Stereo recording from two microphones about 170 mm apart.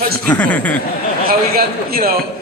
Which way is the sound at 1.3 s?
60° right (ahead or behind).